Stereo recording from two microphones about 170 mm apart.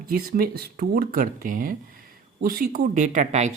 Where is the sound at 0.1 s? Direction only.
60° right (ahead or behind).